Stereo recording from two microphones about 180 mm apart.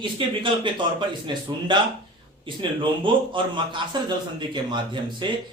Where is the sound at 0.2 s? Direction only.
30° right (ahead or behind).